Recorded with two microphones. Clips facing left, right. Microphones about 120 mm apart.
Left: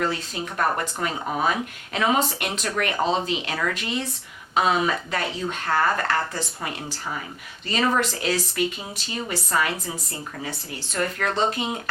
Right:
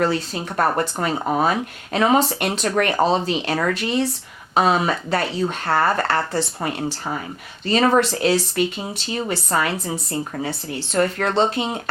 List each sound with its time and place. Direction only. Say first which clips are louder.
0.5 s speech: right 5 dB; 35° right (ahead or behind)
7.7 s speech: right 6 dB; 30° right (ahead or behind)
10.9 s speech: right 6 dB; 30° right (ahead or behind)